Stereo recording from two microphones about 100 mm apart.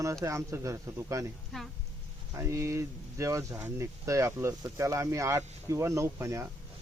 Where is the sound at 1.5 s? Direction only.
5° left (ahead or behind).